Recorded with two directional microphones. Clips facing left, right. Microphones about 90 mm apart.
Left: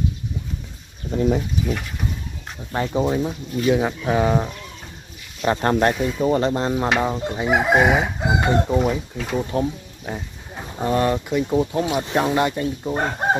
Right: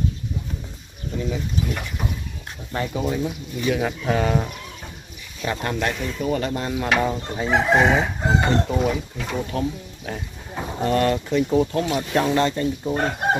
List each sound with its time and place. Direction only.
1.1 s speech: 45° left (ahead or behind)
2.7 s speech: 25° left (ahead or behind)
4.0 s chicken: 15° left (ahead or behind)
5.4 s speech: 35° left (ahead or behind)
5.9 s chicken: 15° left (ahead or behind)
6.2 s speech: 30° left (ahead or behind)
7.2 s chicken: 15° left (ahead or behind)
9.5 s speech: 20° left (ahead or behind)
10.8 s chicken: 15° left (ahead or behind)